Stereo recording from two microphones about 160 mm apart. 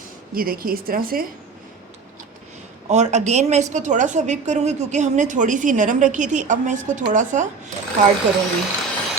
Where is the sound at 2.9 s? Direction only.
45° right (ahead or behind).